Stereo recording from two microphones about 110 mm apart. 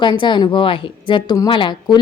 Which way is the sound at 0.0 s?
45° left (ahead or behind).